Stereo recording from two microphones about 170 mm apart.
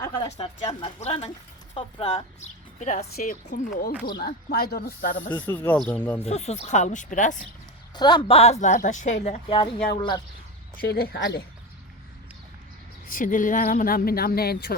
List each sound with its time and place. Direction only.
0.3 s speech: 35° left (ahead or behind); by 5.3 s 55° left (ahead or behind)
5.3 s speech: 10° left (ahead or behind)
6.2 s speech: 40° left (ahead or behind)
7.9 s a woman's voice: 25° left (ahead or behind)
8.4 s speech: 40° left (ahead or behind)
9.9 s a woman's voice: 25° left (ahead or behind)
10.8 s speech: 60° left (ahead or behind)
13.1 s speech: 50° left (ahead or behind)